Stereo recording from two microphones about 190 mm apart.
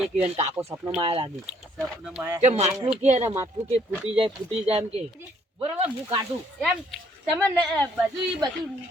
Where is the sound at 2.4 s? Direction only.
35° right (ahead or behind).